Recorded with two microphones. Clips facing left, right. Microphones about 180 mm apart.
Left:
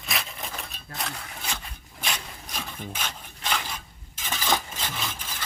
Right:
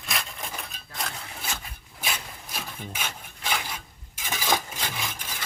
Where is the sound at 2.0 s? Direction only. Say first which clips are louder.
Even; 5° right (ahead or behind).